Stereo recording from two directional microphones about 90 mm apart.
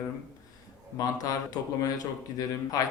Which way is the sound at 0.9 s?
45° left (ahead or behind).